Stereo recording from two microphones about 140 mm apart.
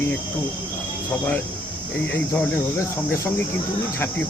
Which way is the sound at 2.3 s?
20° left (ahead or behind).